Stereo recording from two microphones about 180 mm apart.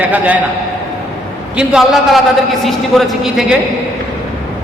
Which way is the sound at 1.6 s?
5° right (ahead or behind).